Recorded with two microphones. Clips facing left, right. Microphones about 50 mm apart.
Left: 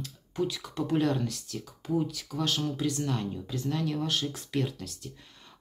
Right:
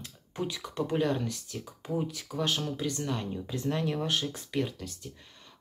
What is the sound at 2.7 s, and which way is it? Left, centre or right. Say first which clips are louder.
Speech: left 2 dB; centre.